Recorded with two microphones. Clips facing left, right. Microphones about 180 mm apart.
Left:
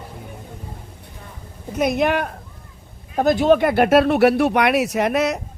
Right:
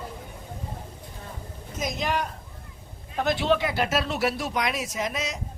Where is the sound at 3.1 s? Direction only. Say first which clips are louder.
Left 8 dB; 45° left (ahead or behind).